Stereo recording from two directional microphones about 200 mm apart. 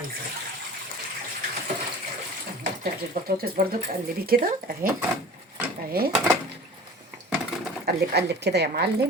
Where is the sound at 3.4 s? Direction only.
50° right (ahead or behind).